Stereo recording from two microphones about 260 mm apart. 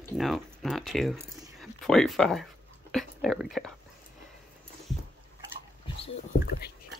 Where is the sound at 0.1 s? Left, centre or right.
Centre.